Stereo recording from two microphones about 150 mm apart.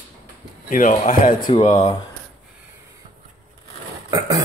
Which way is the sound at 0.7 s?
60° left (ahead or behind).